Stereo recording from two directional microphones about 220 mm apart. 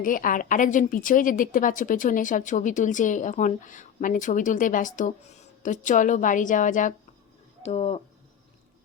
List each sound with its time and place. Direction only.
0.0 s a woman's voice: 40° left (ahead or behind)